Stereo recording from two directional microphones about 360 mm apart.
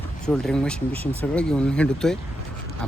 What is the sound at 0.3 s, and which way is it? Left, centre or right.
Speech, centre.